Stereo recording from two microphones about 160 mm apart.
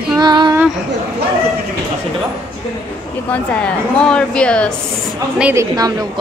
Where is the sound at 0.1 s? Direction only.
25° right (ahead or behind).